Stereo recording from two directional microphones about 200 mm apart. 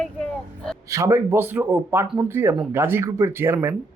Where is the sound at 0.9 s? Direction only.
15° right (ahead or behind).